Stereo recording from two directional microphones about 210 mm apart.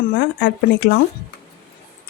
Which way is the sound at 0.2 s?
55° left (ahead or behind).